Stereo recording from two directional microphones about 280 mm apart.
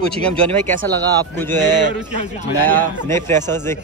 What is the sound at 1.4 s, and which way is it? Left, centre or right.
Speech, centre.